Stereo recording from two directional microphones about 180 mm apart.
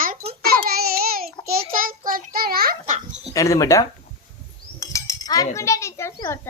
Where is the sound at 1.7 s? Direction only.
50° right (ahead or behind).